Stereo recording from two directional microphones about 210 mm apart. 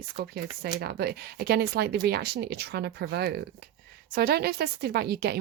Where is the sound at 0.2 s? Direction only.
50° right (ahead or behind).